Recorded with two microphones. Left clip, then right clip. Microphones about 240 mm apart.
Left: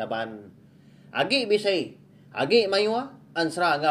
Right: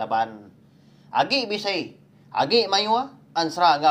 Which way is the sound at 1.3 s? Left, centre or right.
Right.